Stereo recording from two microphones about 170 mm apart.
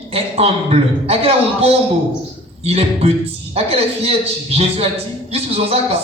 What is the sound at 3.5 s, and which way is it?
Speech, 35° right (ahead or behind).